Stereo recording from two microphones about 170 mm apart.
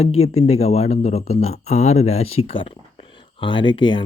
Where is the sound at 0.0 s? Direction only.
35° left (ahead or behind).